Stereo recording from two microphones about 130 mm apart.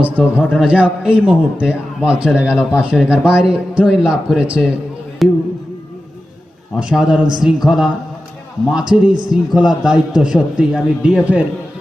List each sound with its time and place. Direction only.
0.0 s a man's voice: 5° right (ahead or behind)
6.7 s a man's voice: 5° right (ahead or behind)
8.8 s a man's voice: 35° right (ahead or behind)
9.3 s a man's voice: centre (ahead or behind)